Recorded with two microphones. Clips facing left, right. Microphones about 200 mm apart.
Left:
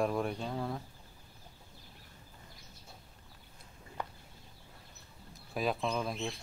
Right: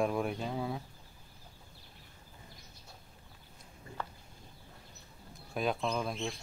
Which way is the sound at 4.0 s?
15° left (ahead or behind).